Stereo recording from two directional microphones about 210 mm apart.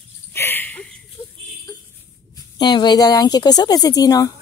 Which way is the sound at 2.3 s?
20° left (ahead or behind).